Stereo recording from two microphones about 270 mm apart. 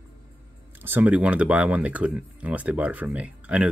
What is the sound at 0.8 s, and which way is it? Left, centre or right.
Speech, centre.